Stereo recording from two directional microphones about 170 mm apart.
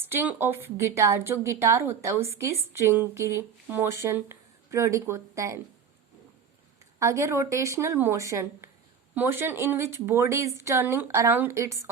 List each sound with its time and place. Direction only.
0.0 s a woman's voice: 10° right (ahead or behind)
7.0 s a woman's voice: 15° right (ahead or behind)